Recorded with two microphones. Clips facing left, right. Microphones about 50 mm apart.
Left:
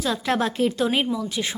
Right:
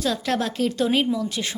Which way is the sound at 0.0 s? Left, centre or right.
Centre.